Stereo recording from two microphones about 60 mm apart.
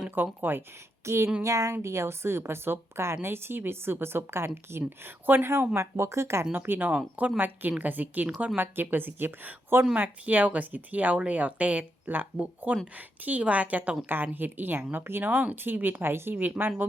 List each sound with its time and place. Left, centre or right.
0.2 s a woman's voice: right
1.0 s a woman's voice: right
5.7 s speech: right
6.4 s a woman's voice: right